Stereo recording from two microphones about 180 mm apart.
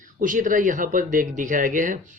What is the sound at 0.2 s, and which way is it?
Speech, 45° right (ahead or behind).